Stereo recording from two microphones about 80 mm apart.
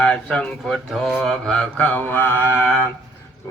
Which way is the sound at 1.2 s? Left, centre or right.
Centre.